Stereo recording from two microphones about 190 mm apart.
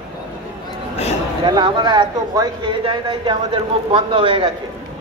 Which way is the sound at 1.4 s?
25° right (ahead or behind).